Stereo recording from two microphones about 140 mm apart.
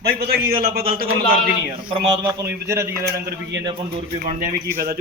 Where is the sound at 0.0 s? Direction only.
90° right.